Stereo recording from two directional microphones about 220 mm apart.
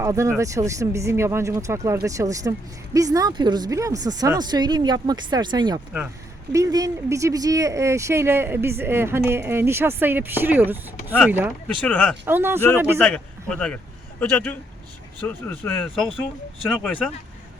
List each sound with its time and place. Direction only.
0.0 s speech: 15° right (ahead or behind)
13.0 s a man's voice: 5° left (ahead or behind)